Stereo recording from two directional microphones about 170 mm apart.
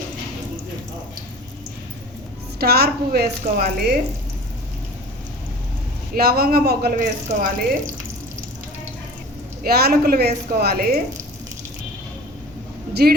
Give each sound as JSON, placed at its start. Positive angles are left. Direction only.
{"t": 2.6, "sound": "a woman's voice", "side_deg": -70}
{"t": 6.1, "sound": "a man's voice", "side_deg": -65}
{"t": 7.0, "sound": "speech", "side_deg": -50}
{"t": 9.6, "sound": "a woman's voice", "side_deg": -65}
{"t": 12.9, "sound": "speech", "side_deg": -70}